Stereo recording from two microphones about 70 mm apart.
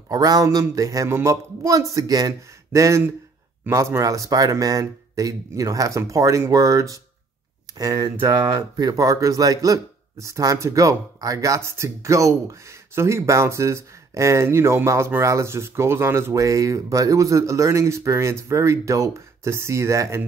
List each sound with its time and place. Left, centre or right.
0.1 s speech: right
16.4 s speech: right